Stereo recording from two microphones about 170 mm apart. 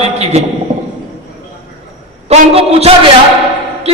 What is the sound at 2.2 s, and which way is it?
Speech, 35° right (ahead or behind).